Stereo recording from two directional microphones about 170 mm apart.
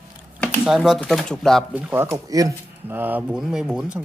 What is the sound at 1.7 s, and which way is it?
Speech, 10° right (ahead or behind).